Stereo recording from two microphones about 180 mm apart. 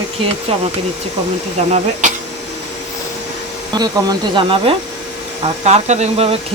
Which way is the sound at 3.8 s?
25° right (ahead or behind).